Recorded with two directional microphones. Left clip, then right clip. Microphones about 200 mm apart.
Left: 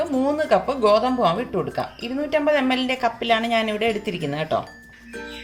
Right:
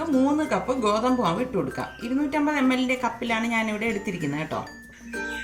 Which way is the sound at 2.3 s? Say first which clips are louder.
Left 6 dB; 35° left (ahead or behind).